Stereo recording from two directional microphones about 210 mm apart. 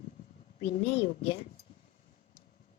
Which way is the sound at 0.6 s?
30° left (ahead or behind).